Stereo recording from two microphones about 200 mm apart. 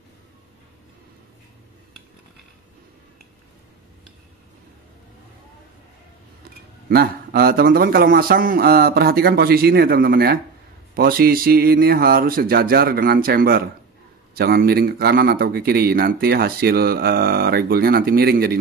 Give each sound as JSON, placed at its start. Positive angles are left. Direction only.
{"t": 6.9, "sound": "a man's voice", "side_deg": -50}